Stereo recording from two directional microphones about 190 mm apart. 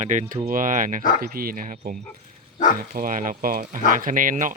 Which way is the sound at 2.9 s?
45° right (ahead or behind).